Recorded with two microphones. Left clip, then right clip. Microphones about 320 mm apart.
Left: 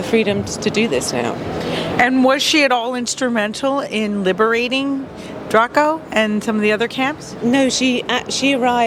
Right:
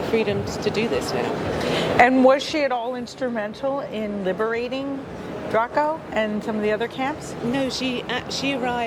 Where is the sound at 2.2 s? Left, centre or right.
Left.